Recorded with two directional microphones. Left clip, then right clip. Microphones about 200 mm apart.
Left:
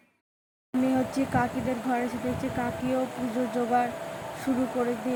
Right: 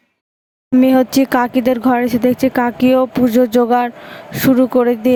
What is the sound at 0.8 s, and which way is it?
Speech, 55° right (ahead or behind).